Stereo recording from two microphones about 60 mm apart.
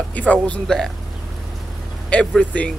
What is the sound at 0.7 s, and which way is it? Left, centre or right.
Speech, centre.